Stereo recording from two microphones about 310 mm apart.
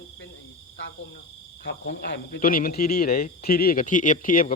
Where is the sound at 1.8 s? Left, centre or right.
Left.